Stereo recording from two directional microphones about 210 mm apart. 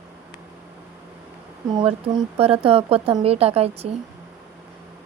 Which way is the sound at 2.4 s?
25° right (ahead or behind).